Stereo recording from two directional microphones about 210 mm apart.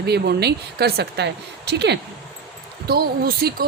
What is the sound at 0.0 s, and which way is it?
Speech, 50° right (ahead or behind).